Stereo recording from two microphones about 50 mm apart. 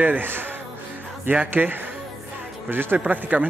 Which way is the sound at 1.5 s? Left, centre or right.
Right.